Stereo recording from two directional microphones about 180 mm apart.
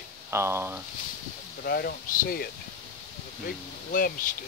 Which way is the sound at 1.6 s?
60° left (ahead or behind).